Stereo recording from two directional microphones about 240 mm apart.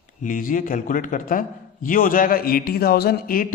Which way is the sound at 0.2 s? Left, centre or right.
Left.